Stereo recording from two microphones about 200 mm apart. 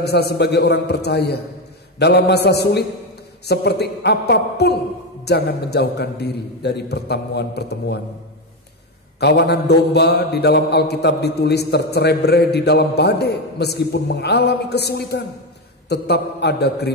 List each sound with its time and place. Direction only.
0.0 s mantra: 55° left (ahead or behind)
9.2 s mantra: 55° left (ahead or behind)